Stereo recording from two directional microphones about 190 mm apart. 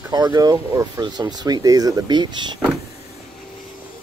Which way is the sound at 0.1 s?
20° right (ahead or behind).